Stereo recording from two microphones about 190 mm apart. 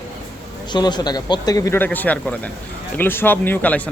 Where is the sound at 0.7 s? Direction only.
20° left (ahead or behind).